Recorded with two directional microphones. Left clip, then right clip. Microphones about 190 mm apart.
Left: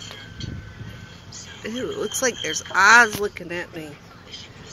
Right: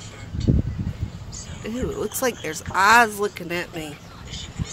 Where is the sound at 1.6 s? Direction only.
10° right (ahead or behind).